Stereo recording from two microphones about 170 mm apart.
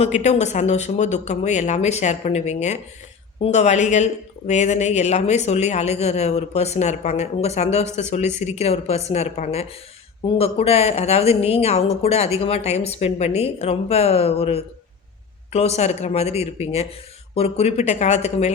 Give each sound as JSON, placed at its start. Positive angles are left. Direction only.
{"t": 0.0, "sound": "speech", "side_deg": 40}